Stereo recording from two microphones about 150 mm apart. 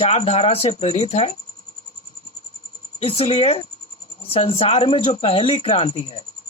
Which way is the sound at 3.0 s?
40° left (ahead or behind).